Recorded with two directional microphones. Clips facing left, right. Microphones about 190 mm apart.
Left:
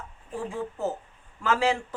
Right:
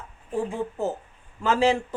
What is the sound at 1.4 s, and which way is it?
Speech, 20° right (ahead or behind).